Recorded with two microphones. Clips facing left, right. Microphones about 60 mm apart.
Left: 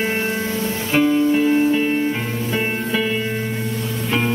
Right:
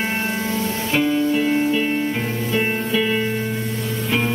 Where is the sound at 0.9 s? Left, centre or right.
Left.